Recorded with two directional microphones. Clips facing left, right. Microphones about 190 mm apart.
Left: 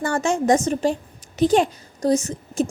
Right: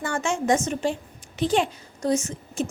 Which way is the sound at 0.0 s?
40° left (ahead or behind).